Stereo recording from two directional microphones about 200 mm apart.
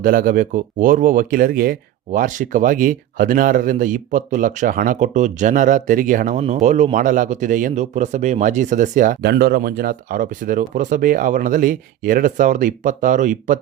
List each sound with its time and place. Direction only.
0.0 s speech: 45° right (ahead or behind)